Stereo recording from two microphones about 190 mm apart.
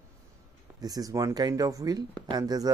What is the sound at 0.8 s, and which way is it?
Speech, 20° right (ahead or behind).